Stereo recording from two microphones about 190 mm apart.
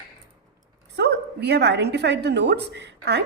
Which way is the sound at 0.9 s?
65° right (ahead or behind).